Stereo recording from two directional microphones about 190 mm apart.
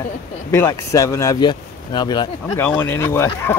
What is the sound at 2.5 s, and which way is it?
Speech, 10° left (ahead or behind).